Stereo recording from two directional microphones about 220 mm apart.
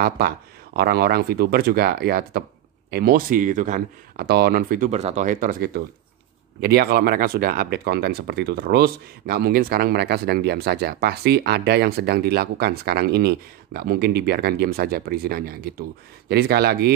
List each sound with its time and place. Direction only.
0.7 s speech: 45° right (ahead or behind)